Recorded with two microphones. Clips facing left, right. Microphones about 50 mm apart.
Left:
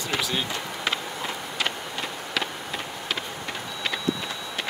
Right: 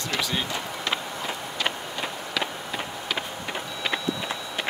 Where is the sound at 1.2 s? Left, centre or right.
Centre.